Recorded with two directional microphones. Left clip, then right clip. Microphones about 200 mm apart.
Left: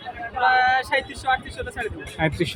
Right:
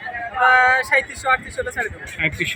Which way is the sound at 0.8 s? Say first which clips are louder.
Right 5 dB; centre (ahead or behind).